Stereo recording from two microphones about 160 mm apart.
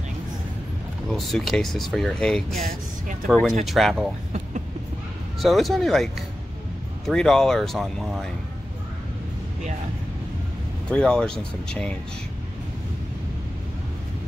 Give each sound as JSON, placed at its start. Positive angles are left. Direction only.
{"t": 1.1, "sound": "speech", "side_deg": 0}
{"t": 2.6, "sound": "speech", "side_deg": -60}
{"t": 3.6, "sound": "speech", "side_deg": 0}
{"t": 5.4, "sound": "speech", "side_deg": 0}
{"t": 10.9, "sound": "speech", "side_deg": 5}